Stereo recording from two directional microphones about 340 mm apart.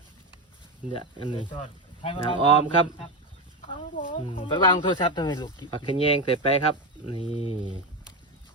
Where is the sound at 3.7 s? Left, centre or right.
Left.